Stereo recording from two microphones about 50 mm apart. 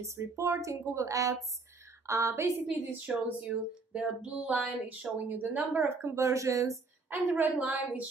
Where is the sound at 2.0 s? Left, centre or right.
Right.